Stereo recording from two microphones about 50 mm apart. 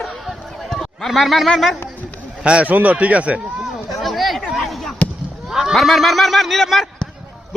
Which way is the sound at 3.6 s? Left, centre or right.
Centre.